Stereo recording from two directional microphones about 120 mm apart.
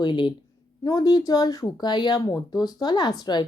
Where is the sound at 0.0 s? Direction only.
40° left (ahead or behind).